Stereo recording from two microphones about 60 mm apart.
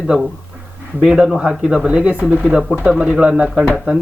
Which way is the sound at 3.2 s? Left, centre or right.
Centre.